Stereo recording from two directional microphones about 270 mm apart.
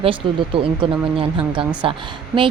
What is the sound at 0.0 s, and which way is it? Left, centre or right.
A woman's voice, centre.